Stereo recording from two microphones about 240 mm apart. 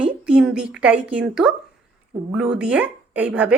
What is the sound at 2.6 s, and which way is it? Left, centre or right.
Speech, centre.